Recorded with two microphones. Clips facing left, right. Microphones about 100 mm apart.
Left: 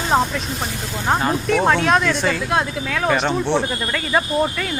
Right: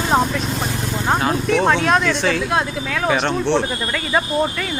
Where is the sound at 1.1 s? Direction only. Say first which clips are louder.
Even; centre (ahead or behind).